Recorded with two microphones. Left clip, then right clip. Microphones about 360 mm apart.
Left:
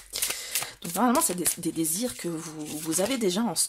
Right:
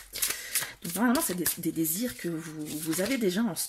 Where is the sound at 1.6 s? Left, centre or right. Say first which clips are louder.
Left 2 dB; centre.